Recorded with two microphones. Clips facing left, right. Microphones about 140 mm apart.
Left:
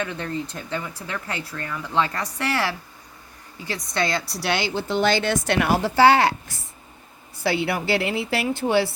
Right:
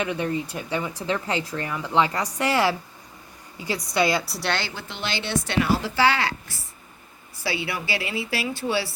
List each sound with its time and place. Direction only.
0.0 s speech: 15° right (ahead or behind)
1.0 s a woman's voice: 20° right (ahead or behind)
4.4 s speech: 10° left (ahead or behind)
4.7 s speech: 30° left (ahead or behind)
4.9 s a woman's voice: 50° left (ahead or behind)
7.4 s speech: 55° left (ahead or behind)